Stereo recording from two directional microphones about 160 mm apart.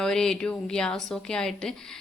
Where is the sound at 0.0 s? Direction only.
5° left (ahead or behind).